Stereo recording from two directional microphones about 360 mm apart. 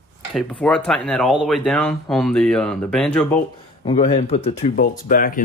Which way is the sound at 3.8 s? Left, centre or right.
Centre.